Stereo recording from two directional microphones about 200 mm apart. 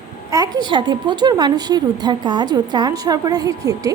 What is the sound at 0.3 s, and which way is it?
A woman's voice, 20° right (ahead or behind).